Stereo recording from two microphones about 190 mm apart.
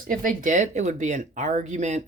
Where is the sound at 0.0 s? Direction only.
45° right (ahead or behind).